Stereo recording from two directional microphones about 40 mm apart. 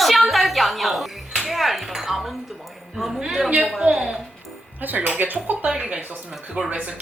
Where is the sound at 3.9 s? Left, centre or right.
Centre.